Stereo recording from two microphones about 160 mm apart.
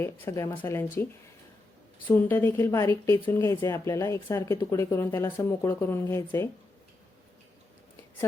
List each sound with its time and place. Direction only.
0.0 s a woman's voice: 20° left (ahead or behind)
2.0 s a woman's voice: 10° left (ahead or behind)